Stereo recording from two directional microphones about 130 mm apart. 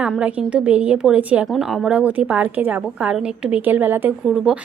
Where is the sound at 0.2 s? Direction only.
10° right (ahead or behind).